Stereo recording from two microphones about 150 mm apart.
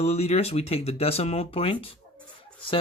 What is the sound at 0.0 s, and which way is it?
Speech, 45° left (ahead or behind).